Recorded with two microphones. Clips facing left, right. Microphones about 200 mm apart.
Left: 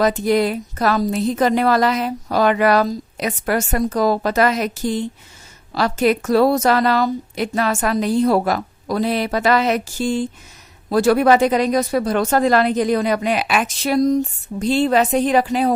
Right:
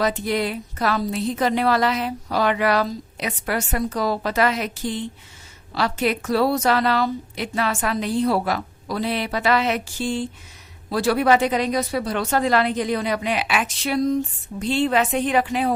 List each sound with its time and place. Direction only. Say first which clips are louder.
0.0 s speech: left 6 dB; 45° left (ahead or behind)